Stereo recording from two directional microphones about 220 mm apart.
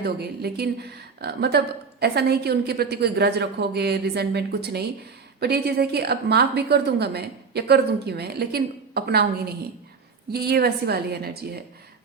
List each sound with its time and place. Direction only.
0.0 s a woman's voice: 45° right (ahead or behind)
10.3 s a woman's voice: 45° right (ahead or behind)